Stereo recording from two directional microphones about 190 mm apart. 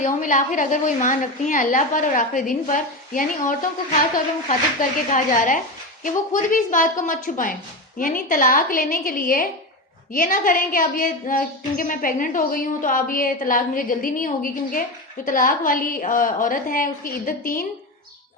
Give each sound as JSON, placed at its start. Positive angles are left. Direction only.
{"t": 0.0, "sound": "a woman's voice", "side_deg": 40}